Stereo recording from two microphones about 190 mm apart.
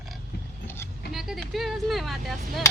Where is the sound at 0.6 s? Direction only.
15° left (ahead or behind).